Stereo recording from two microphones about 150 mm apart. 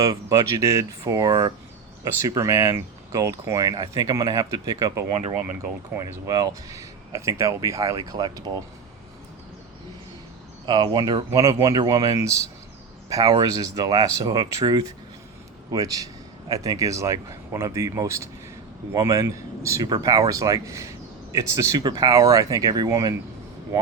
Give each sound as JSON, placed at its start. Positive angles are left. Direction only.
{"t": 0.0, "sound": "speech", "side_deg": -20}
{"t": 5.1, "sound": "speech", "side_deg": -40}
{"t": 5.9, "sound": "speech", "side_deg": -20}
{"t": 10.7, "sound": "speech", "side_deg": -30}